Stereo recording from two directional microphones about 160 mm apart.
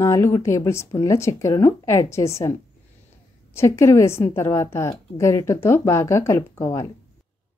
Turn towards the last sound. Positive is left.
turn(degrees=20)  # may be behind; listen again after turning